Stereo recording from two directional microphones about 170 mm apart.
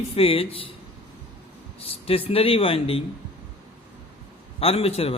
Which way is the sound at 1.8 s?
35° left (ahead or behind).